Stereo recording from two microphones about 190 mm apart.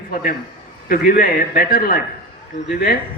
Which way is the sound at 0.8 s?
45° left (ahead or behind).